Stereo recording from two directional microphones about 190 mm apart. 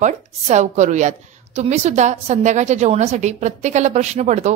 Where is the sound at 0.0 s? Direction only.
35° right (ahead or behind).